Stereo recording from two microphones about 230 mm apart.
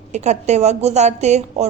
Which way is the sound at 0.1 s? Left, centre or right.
Right.